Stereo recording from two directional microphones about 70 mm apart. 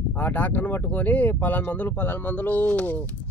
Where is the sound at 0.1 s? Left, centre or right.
Left.